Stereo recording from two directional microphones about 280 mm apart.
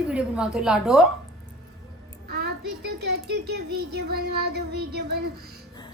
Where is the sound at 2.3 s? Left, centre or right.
Right.